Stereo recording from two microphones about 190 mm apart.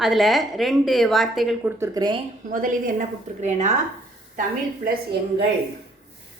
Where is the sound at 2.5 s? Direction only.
45° right (ahead or behind).